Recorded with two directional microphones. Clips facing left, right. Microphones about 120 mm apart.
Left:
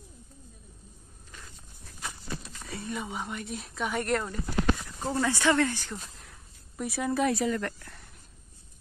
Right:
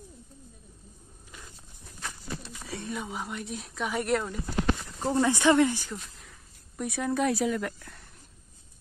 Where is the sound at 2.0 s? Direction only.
10° left (ahead or behind).